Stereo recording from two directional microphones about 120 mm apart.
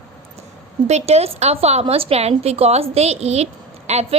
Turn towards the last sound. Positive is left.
turn(degrees=-65)  # may be behind; listen again after turning